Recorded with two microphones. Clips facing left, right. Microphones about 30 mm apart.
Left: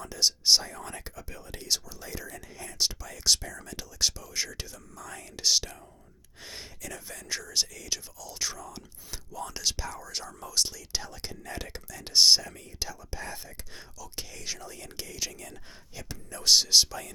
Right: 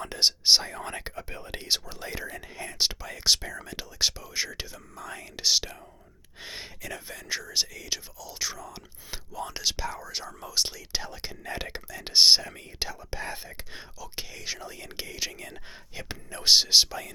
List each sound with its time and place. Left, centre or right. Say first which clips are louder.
0.0 s speech: right 2 dB; right; by 8.8 s centre
9.0 s speech: right 3 dB; right